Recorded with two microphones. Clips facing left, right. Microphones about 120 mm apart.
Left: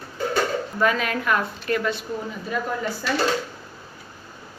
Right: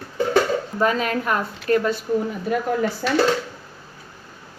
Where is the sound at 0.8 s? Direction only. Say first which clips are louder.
Right 1 dB; 35° right (ahead or behind).